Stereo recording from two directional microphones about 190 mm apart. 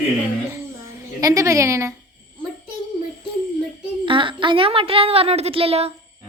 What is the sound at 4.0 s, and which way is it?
A woman's voice, 25° right (ahead or behind).